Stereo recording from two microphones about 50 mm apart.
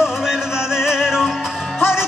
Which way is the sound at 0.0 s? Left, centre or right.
Centre.